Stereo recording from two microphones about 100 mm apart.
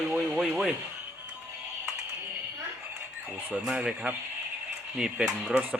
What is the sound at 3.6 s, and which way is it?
Speech, 10° right (ahead or behind).